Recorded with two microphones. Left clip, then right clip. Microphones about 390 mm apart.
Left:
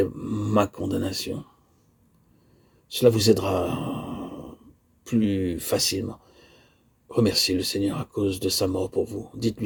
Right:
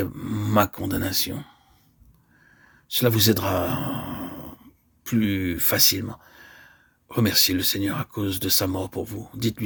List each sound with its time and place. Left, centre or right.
0.0 s speech: right
2.9 s speech: right